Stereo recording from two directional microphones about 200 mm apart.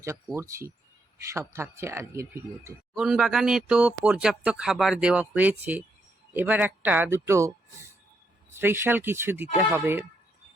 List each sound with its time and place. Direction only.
0.0 s speech: 15° right (ahead or behind)
2.9 s speech: centre (ahead or behind)
8.5 s speech: 10° right (ahead or behind)